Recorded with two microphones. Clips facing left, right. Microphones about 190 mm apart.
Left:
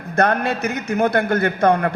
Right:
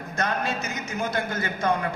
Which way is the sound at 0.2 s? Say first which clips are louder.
Left 9 dB; 60° left (ahead or behind).